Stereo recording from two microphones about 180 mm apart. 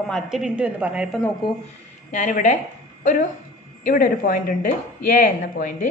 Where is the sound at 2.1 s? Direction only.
45° left (ahead or behind).